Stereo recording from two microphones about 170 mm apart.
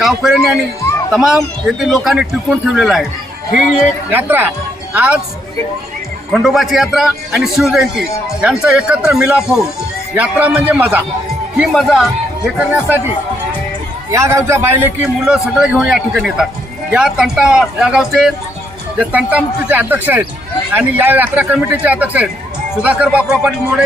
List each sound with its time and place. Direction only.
0.0 s a man's voice: centre (ahead or behind)
6.3 s a man's voice: centre (ahead or behind)
14.1 s a man's voice: 15° right (ahead or behind)